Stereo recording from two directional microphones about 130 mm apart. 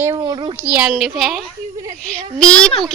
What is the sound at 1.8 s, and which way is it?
Speech, 30° right (ahead or behind).